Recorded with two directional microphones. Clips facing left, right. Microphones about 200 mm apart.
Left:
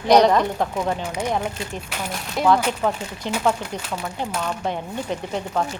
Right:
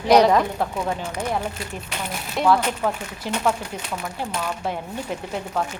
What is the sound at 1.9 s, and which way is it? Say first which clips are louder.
Speech: left 1 dB; 5° left (ahead or behind).